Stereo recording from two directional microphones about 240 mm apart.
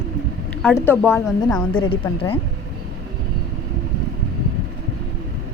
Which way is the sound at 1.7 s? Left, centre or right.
Left.